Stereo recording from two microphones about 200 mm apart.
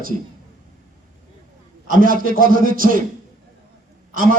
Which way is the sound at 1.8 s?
45° right (ahead or behind).